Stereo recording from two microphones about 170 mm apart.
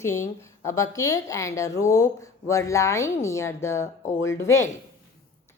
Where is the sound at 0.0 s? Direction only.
15° left (ahead or behind).